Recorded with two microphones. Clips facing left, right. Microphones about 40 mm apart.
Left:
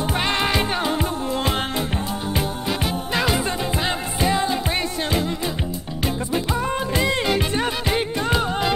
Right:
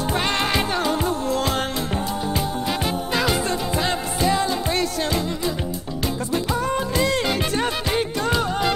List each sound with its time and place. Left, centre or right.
0.1 s music: centre
0.7 s music: left
3.1 s music: centre
6.6 s music: centre